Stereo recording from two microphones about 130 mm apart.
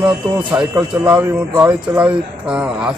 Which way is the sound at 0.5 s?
15° right (ahead or behind).